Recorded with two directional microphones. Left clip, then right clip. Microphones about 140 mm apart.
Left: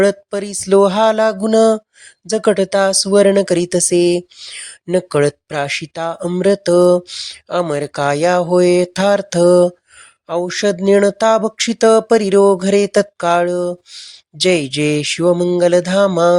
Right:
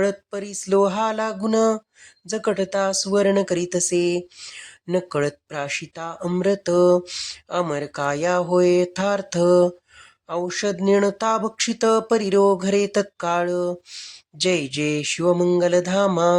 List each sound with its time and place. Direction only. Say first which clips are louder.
0.0 s speech: left 8 dB; 45° left (ahead or behind)